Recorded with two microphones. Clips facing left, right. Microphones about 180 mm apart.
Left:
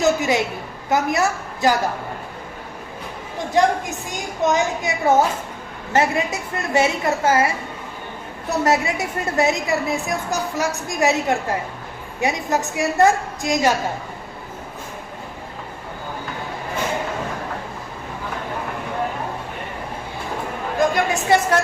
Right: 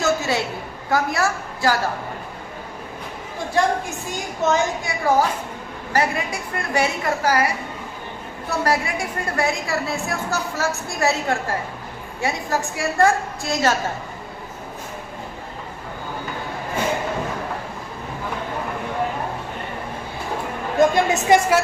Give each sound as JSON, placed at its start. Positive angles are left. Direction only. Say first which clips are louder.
{"t": 0.0, "sound": "a woman's voice", "louder": "left 3 dB", "side_deg": 15}
{"t": 3.5, "sound": "a woman's voice", "louder": "left 3 dB", "side_deg": 20}
{"t": 20.9, "sound": "a woman's voice", "louder": "right 2 dB", "side_deg": -20}